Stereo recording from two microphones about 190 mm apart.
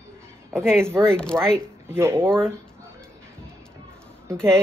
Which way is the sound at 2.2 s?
5° left (ahead or behind).